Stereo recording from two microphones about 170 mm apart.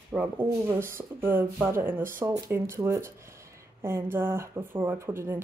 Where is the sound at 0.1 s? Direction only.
10° right (ahead or behind).